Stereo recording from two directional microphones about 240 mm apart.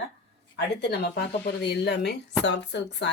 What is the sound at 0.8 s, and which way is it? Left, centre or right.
A woman's voice, left.